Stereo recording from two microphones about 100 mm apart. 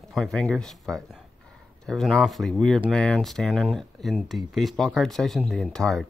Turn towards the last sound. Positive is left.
turn(degrees=5)  # may be behind; listen again after turning